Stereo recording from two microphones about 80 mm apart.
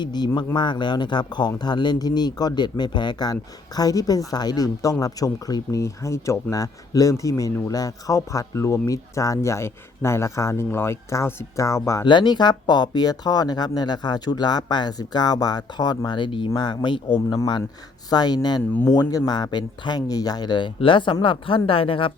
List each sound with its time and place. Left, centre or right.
0.0 s speech: left
3.8 s speech: left
5.8 s speech: left
12.0 s speech: left
16.0 s speech: left
16.6 s speech: left
17.2 s speech: left
18.1 s speech: left
20.0 s speech: left